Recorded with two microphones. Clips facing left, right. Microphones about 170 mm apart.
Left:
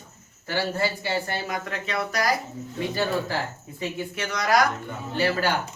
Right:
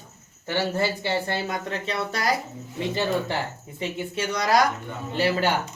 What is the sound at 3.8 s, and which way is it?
Speech, 25° right (ahead or behind).